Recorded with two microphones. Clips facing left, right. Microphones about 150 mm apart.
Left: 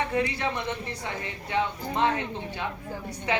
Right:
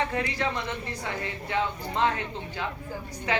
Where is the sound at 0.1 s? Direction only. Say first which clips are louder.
Left 2 dB; 20° left (ahead or behind).